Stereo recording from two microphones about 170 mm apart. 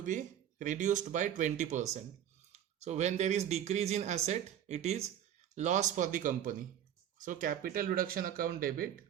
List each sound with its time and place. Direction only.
0.0 s speech: 50° right (ahead or behind)